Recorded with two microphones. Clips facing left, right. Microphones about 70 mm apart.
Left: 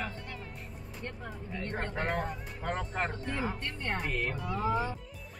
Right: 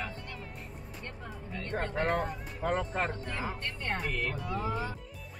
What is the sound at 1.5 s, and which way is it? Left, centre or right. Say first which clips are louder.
Speech: right 1 dB; centre.